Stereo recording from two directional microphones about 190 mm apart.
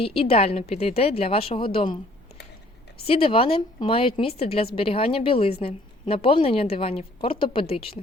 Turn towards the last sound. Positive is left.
turn(degrees=30)  # may be behind; listen again after turning